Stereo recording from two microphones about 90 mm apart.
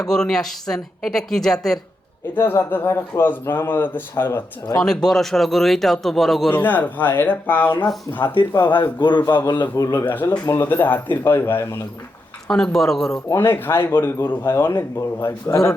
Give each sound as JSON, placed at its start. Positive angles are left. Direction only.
{"t": 0.1, "sound": "speech", "side_deg": 5}
{"t": 2.3, "sound": "speech", "side_deg": 25}
{"t": 4.8, "sound": "a man's voice", "side_deg": 5}
{"t": 6.5, "sound": "speech", "side_deg": 20}
{"t": 8.7, "sound": "a man's voice", "side_deg": 55}
{"t": 9.5, "sound": "a man's voice", "side_deg": 40}
{"t": 10.1, "sound": "speech", "side_deg": 25}
{"t": 12.5, "sound": "a man's voice", "side_deg": 5}
{"t": 13.3, "sound": "speech", "side_deg": 25}